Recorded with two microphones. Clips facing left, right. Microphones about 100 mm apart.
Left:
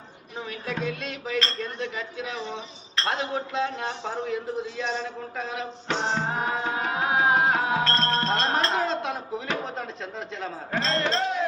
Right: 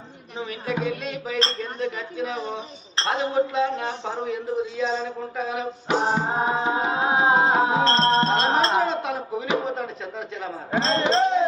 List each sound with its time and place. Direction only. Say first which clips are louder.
0.3 s music: right 4 dB; 5° right (ahead or behind)
6.3 s music: right 5 dB; 25° right (ahead or behind)
8.7 s a sound: right 4 dB; 5° right (ahead or behind)
9.5 s speech: right 7 dB; 5° right (ahead or behind)
10.7 s speech: right 5 dB; 25° right (ahead or behind)